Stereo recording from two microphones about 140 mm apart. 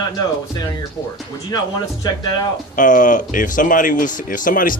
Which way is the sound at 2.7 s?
65° left (ahead or behind).